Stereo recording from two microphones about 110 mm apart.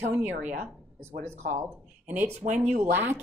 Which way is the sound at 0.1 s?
15° right (ahead or behind).